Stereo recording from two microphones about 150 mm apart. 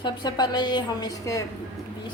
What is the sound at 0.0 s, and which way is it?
A woman's voice, 30° left (ahead or behind).